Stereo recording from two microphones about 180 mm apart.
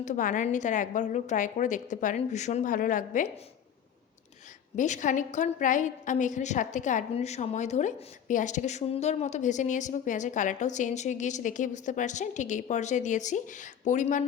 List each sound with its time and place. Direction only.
0.0 s a woman's voice: 45° left (ahead or behind)
4.8 s a woman's voice: 45° left (ahead or behind)